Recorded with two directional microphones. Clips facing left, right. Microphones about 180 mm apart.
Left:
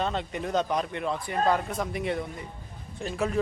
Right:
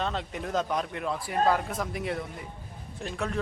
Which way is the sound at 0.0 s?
Centre (ahead or behind).